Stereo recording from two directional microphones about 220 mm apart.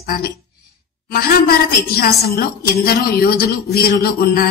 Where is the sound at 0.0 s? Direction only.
45° left (ahead or behind).